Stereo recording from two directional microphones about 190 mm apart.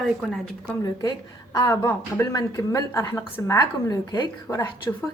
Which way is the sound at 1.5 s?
20° left (ahead or behind).